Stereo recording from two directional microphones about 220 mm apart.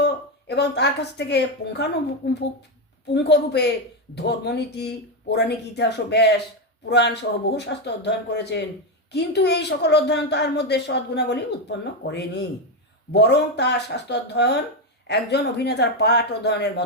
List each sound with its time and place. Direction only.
0.0 s speech: 50° left (ahead or behind)